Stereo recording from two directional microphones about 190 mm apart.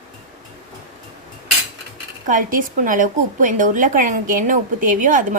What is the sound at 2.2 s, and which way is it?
A woman's voice, 45° right (ahead or behind).